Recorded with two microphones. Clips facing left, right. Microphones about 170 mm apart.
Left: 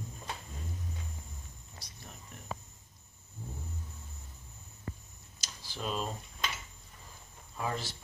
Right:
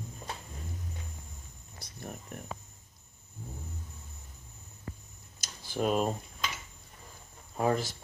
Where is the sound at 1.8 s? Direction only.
55° right (ahead or behind).